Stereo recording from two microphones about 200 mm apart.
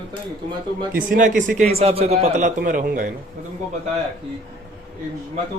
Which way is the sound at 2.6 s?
45° right (ahead or behind).